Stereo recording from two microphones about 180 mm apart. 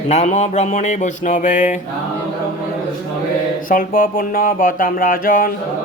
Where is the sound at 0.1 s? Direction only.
40° left (ahead or behind).